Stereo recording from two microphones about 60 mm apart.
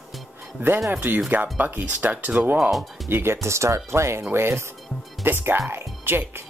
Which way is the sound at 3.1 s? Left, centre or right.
Right.